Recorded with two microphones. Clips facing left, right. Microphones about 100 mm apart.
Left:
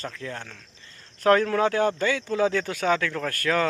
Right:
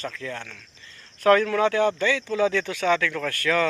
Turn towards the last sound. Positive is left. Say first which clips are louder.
# right 1 dB
turn(degrees=40)  # may be behind; listen again after turning